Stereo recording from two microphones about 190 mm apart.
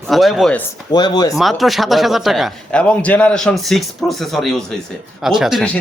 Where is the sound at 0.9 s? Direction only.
20° left (ahead or behind).